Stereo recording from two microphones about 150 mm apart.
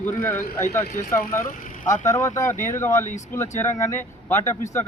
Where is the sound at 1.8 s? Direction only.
55° left (ahead or behind).